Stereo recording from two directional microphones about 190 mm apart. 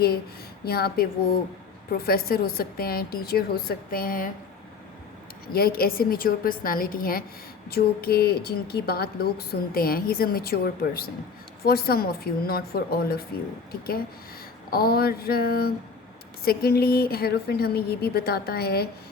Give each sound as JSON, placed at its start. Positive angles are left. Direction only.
{"t": 0.6, "sound": "a woman's voice", "side_deg": 55}
{"t": 5.5, "sound": "speech", "side_deg": 50}
{"t": 14.7, "sound": "a woman's voice", "side_deg": 55}